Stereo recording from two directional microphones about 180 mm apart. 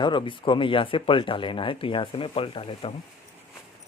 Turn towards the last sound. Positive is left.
turn(degrees=30)  # may be behind; listen again after turning